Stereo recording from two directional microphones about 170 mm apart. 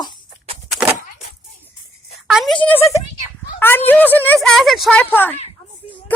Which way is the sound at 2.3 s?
Centre (ahead or behind).